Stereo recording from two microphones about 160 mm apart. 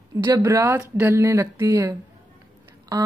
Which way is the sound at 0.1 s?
25° right (ahead or behind).